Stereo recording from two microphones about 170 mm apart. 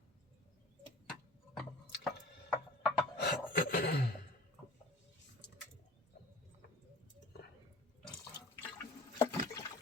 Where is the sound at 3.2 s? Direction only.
65° left (ahead or behind).